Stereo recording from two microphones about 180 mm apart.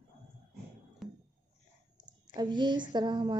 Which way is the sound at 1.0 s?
Centre (ahead or behind).